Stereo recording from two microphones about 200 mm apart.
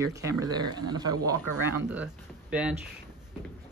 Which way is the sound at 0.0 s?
15° right (ahead or behind).